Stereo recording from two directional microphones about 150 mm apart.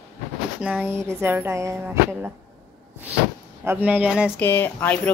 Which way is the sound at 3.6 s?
10° right (ahead or behind).